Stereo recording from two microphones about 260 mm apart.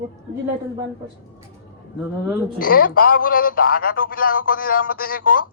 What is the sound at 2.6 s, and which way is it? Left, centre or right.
Speech, left.